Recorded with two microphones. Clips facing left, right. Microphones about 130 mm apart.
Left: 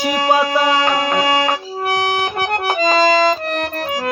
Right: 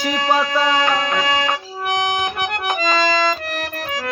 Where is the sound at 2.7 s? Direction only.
30° left (ahead or behind).